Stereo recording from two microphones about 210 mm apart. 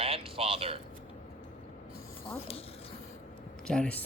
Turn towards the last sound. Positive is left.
turn(degrees=5)  # may be behind; listen again after turning